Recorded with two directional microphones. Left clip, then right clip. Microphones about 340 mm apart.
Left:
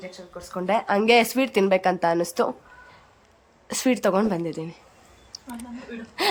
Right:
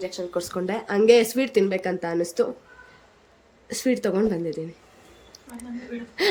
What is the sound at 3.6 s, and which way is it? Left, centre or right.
Speech, centre.